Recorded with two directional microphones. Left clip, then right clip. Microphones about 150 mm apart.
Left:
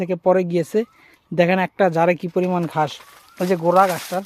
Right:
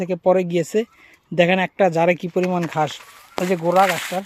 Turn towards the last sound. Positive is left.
turn(degrees=0)  # may be behind; listen again after turning